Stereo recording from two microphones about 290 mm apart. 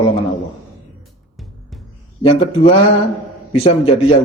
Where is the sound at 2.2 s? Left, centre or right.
Centre.